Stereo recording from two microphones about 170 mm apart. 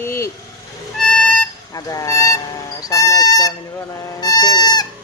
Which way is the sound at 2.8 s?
20° left (ahead or behind).